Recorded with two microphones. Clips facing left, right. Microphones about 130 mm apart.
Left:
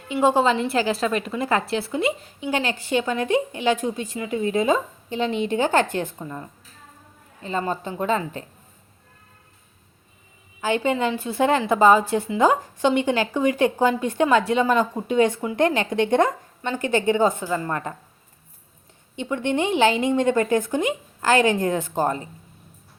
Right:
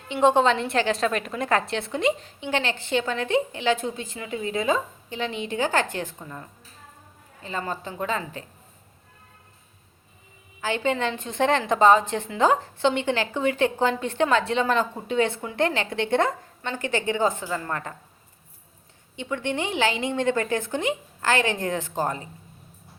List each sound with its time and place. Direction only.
0.1 s a woman's voice: 5° left (ahead or behind)
7.4 s a woman's voice: 25° left (ahead or behind)
10.6 s a woman's voice: 15° left (ahead or behind)
19.1 s a woman's voice: 20° left (ahead or behind)